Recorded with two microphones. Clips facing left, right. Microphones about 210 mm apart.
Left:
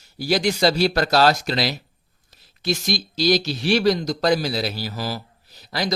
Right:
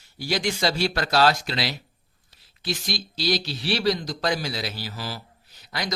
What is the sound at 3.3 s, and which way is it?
Speech, 45° left (ahead or behind).